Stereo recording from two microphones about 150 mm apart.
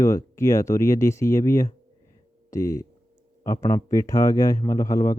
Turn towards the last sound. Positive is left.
turn(degrees=20)  # may be behind; listen again after turning